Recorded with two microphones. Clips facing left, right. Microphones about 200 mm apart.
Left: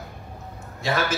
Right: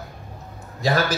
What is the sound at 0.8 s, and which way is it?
Speech, 35° right (ahead or behind).